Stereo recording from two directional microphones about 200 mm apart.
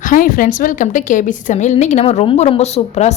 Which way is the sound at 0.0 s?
40° left (ahead or behind).